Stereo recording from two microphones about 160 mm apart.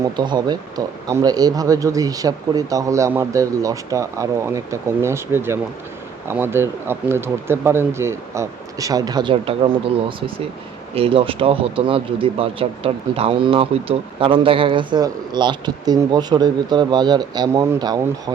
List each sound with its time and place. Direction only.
0.2 s speech: 25° right (ahead or behind)